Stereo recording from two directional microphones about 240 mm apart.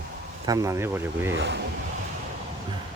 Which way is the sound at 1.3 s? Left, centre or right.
Right.